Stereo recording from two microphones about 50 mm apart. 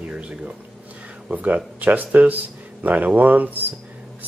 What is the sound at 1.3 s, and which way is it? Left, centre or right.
Speech, right.